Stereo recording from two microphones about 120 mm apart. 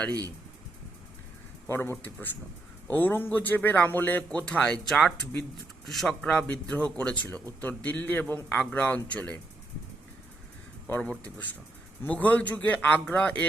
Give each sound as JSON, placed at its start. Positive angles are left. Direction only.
{"t": 1.6, "sound": "a man's voice", "side_deg": 20}
{"t": 10.8, "sound": "speech", "side_deg": 10}